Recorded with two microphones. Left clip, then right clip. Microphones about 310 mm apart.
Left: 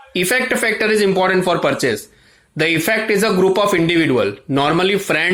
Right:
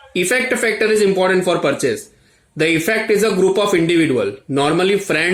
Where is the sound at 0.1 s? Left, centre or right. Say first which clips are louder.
Even; centre.